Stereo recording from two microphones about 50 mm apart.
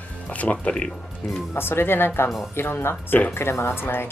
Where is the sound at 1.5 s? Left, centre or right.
Left.